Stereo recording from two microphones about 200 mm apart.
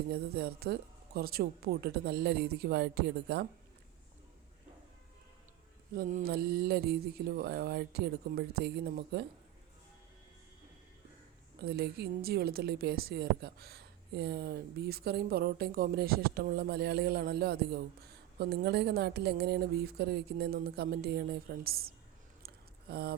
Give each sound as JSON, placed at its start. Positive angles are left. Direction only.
{"t": 0.1, "sound": "a woman's voice", "side_deg": -50}
{"t": 5.9, "sound": "a woman's voice", "side_deg": -45}
{"t": 11.6, "sound": "a woman's voice", "side_deg": -50}
{"t": 22.4, "sound": "a sound", "side_deg": -50}